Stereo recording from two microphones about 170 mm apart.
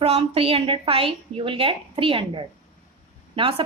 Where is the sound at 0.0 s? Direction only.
35° right (ahead or behind).